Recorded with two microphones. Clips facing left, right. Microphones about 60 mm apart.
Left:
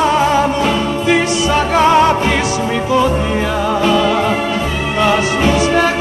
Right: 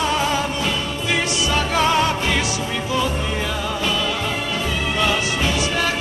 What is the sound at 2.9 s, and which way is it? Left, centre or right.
Music, left.